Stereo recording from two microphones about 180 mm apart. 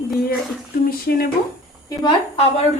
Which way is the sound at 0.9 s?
55° left (ahead or behind).